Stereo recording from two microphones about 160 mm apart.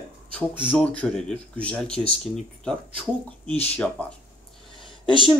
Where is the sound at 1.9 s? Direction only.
35° left (ahead or behind).